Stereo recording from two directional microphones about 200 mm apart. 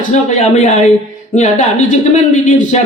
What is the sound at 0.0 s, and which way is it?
A woman's voice, 35° left (ahead or behind).